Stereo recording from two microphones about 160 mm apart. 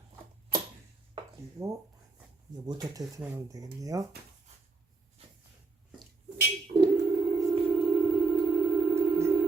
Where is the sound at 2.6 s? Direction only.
25° right (ahead or behind).